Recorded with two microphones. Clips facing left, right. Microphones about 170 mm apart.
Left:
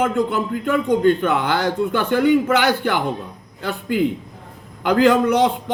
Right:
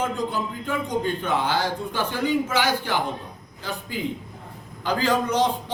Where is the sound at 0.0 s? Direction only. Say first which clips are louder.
Left 7 dB; 65° left (ahead or behind).